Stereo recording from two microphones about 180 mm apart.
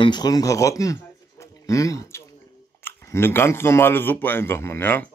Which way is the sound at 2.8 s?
10° left (ahead or behind).